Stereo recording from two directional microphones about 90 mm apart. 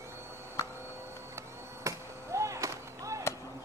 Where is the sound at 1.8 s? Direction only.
35° right (ahead or behind).